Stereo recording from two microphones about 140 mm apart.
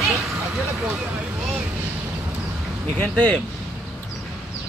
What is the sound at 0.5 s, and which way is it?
Speech, 5° right (ahead or behind).